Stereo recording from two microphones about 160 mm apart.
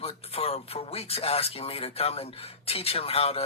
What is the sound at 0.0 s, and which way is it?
Speech, 40° left (ahead or behind).